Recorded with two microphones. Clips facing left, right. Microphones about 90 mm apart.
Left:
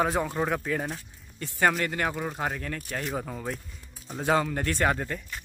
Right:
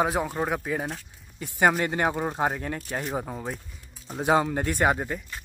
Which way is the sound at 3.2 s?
10° right (ahead or behind).